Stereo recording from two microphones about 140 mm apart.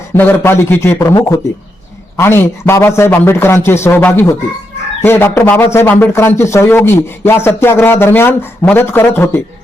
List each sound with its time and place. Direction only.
0.1 s a man's voice: 15° left (ahead or behind)